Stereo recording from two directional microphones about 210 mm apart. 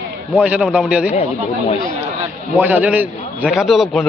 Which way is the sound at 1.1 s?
30° left (ahead or behind).